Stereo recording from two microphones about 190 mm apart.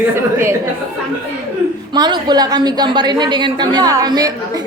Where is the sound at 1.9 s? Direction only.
20° right (ahead or behind).